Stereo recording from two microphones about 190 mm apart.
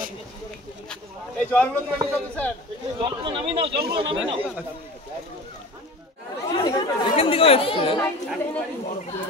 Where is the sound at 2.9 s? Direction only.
25° right (ahead or behind).